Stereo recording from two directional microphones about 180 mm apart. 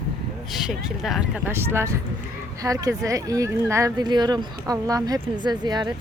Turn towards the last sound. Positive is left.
turn(degrees=-25)  # may be behind; listen again after turning